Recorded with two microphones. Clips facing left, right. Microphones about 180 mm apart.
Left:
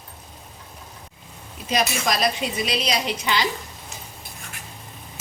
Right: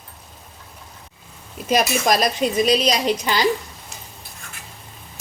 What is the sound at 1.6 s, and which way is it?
A woman's voice, 50° right (ahead or behind).